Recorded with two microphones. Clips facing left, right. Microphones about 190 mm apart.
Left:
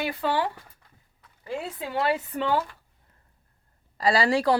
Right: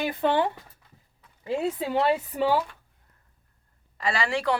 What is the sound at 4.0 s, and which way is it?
Speech, 35° left (ahead or behind).